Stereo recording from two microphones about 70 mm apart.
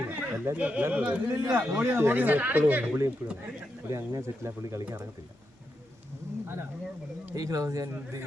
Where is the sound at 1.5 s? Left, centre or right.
Right.